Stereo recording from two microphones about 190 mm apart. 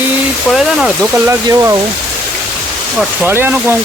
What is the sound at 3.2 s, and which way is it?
Speech, 10° right (ahead or behind).